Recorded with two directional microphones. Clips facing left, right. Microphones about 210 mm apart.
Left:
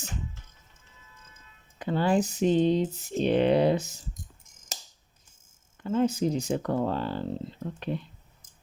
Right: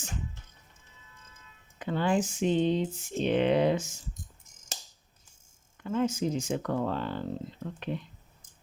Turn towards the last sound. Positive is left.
turn(degrees=35)  # may be behind; listen again after turning